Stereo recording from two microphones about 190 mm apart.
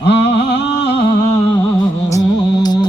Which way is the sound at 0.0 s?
65° left (ahead or behind).